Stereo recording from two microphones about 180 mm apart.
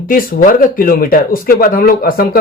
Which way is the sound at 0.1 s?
50° left (ahead or behind).